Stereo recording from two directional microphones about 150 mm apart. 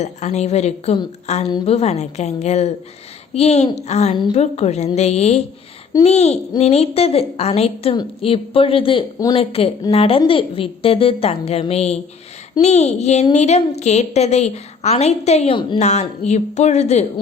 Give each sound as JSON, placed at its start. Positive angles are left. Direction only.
{"t": 0.0, "sound": "a woman's voice", "side_deg": 50}
{"t": 9.1, "sound": "a woman's voice", "side_deg": 25}
{"t": 9.4, "sound": "a woman's voice", "side_deg": 40}
{"t": 15.8, "sound": "a woman's voice", "side_deg": 50}